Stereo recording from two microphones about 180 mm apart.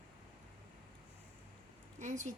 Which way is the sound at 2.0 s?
45° right (ahead or behind).